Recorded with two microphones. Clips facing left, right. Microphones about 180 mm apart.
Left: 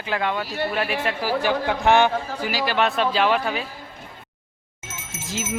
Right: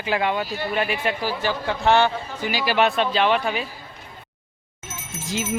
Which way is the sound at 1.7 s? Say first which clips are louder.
Even; 15° left (ahead or behind).